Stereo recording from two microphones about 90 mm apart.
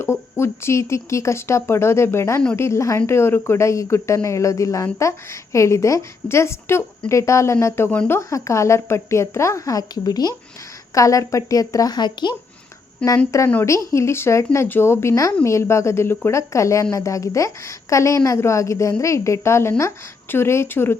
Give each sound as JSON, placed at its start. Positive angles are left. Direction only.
{"t": 0.0, "sound": "a woman's voice", "side_deg": 30}
{"t": 13.0, "sound": "speech", "side_deg": 10}
{"t": 13.7, "sound": "a woman's voice", "side_deg": 35}